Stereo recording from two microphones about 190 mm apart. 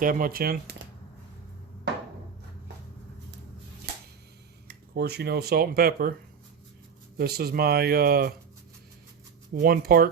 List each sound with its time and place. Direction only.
0.0 s speech: 45° right (ahead or behind)
4.7 s speech: 60° right (ahead or behind)
7.2 s speech: 55° right (ahead or behind)
9.6 s speech: 50° right (ahead or behind)